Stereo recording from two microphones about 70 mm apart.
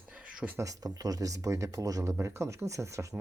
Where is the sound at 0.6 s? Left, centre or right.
Right.